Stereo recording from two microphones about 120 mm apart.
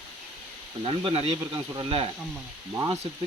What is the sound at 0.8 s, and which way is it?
Speech, 50° right (ahead or behind).